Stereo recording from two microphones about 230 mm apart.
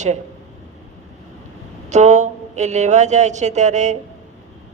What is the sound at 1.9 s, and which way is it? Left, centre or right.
A woman's voice, right.